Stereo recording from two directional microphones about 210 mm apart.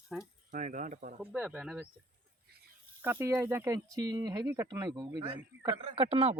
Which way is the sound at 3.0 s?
10° right (ahead or behind).